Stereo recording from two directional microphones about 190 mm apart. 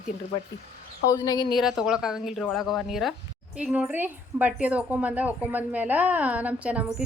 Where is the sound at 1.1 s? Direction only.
20° left (ahead or behind).